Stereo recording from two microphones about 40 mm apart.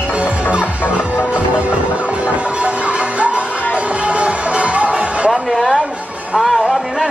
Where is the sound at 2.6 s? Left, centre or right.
Right.